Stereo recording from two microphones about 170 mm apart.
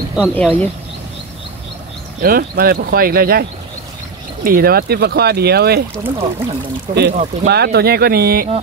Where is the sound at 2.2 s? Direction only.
60° right (ahead or behind).